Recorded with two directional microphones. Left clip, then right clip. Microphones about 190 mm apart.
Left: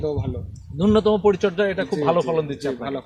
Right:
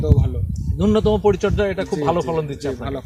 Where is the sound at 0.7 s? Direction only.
15° right (ahead or behind).